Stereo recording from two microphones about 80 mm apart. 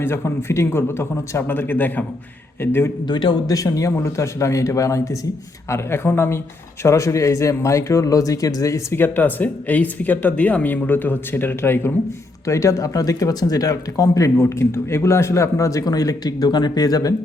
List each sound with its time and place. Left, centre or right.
0.0 s speech: left
3.1 s speech: left
3.4 s speech: left
9.0 s speech: left
12.5 s speech: left